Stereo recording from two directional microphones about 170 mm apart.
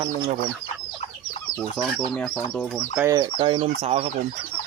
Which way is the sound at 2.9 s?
15° right (ahead or behind).